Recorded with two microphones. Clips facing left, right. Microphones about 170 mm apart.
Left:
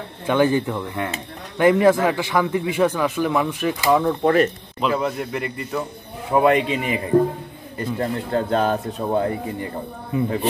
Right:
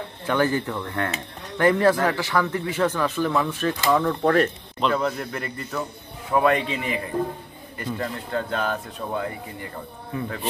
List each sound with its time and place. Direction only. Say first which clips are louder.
0.3 s a man's voice: left 4 dB; 15° left (ahead or behind)
6.3 s speech: left 4 dB; 20° left (ahead or behind)
8.0 s speech: left 6 dB; 35° left (ahead or behind)
10.1 s speech: left 8 dB; 20° left (ahead or behind)